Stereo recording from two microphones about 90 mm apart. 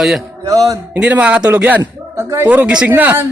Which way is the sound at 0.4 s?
40° right (ahead or behind).